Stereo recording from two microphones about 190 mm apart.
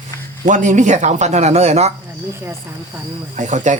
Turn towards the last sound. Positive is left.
turn(degrees=-40)  # may be behind; listen again after turning